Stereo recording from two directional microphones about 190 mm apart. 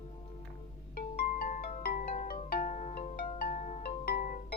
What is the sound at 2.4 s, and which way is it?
Music, 45° left (ahead or behind).